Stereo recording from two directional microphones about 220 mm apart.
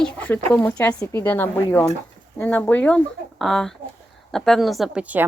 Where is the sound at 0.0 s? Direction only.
5° left (ahead or behind).